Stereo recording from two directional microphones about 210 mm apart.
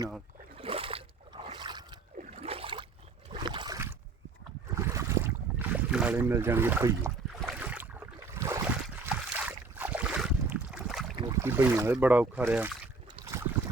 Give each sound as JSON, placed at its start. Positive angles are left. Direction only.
{"t": 0.5, "sound": "a sound", "side_deg": -25}
{"t": 3.3, "sound": "boat", "side_deg": -20}
{"t": 11.4, "sound": "speech", "side_deg": -10}